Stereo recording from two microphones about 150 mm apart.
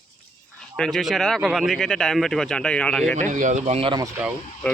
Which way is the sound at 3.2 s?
55° right (ahead or behind).